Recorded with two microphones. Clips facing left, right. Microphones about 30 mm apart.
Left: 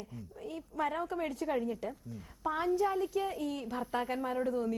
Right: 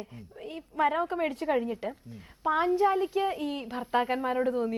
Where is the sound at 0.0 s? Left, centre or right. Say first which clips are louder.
Right 2 dB; right.